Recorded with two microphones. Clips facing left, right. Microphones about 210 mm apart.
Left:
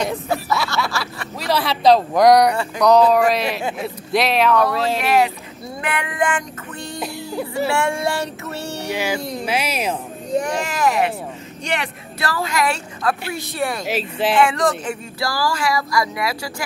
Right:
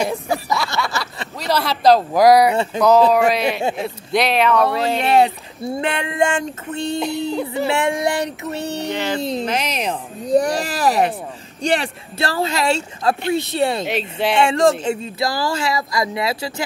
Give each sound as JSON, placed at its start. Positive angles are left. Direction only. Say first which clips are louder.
{"t": 0.0, "sound": "snicker", "louder": "right 1 dB", "side_deg": 0}
{"t": 0.7, "sound": "a sound", "louder": "even", "side_deg": 0}
{"t": 1.4, "sound": "speech", "louder": "even", "side_deg": 0}
{"t": 2.5, "sound": "speech", "louder": "right 4 dB", "side_deg": -25}
{"t": 3.1, "sound": "speech", "louder": "right 1 dB", "side_deg": 0}
{"t": 5.0, "sound": "speech", "louder": "right 4 dB", "side_deg": -30}
{"t": 7.0, "sound": "speech", "louder": "right 2 dB", "side_deg": 5}
{"t": 7.5, "sound": "child singing", "louder": "left 1 dB", "side_deg": -20}
{"t": 8.9, "sound": "speech", "louder": "even", "side_deg": 10}
{"t": 10.3, "sound": "speech", "louder": "right 4 dB", "side_deg": -35}
{"t": 13.8, "sound": "speech", "louder": "even", "side_deg": 0}
{"t": 14.3, "sound": "speech", "louder": "right 3 dB", "side_deg": -25}